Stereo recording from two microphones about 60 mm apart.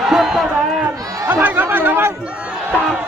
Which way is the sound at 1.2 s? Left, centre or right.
Right.